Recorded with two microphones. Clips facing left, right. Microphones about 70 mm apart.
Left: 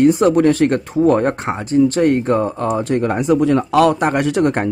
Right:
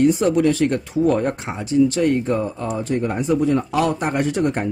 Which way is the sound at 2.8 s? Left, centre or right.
Left.